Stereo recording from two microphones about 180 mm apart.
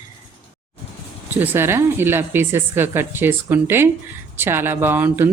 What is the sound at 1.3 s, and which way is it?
A woman's voice, 10° right (ahead or behind).